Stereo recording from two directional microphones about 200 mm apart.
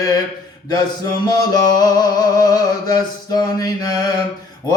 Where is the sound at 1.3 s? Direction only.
20° left (ahead or behind).